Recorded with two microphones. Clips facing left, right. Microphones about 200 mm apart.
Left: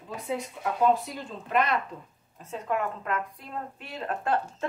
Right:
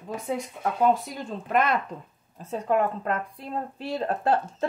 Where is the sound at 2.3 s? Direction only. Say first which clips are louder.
Right 6 dB; 35° right (ahead or behind).